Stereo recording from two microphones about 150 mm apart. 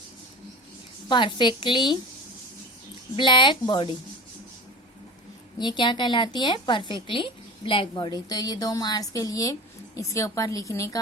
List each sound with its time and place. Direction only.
1.0 s a woman's voice: 30° left (ahead or behind)
3.2 s a woman's voice: 30° left (ahead or behind)
5.5 s a woman's voice: 30° left (ahead or behind)